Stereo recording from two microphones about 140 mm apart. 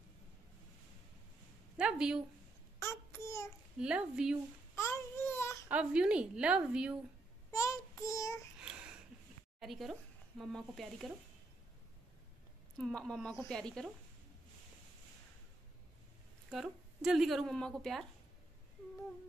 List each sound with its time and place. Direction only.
1.8 s speech: 5° right (ahead or behind)
2.8 s a sound: 20° left (ahead or behind)
3.8 s a woman's voice: 5° right (ahead or behind)
4.7 s baby cry: 20° left (ahead or behind)
5.7 s a woman's voice: 10° right (ahead or behind)
7.5 s child singing: 20° left (ahead or behind)
8.5 s a sound: 5° right (ahead or behind)
9.6 s speech: centre (ahead or behind)
12.7 s a woman's voice: centre (ahead or behind)
16.5 s a woman's voice: 5° right (ahead or behind)